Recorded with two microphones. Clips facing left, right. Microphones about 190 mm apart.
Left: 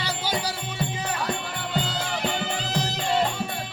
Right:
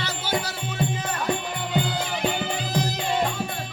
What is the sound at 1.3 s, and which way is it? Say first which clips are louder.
Music: right 4 dB; 15° right (ahead or behind).